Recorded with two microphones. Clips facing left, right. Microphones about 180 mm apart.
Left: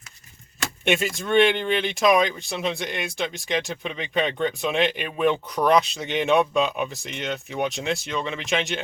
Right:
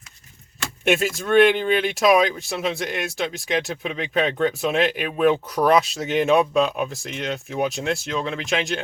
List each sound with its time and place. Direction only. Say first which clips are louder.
0.9 s speech: right 3 dB; centre (ahead or behind)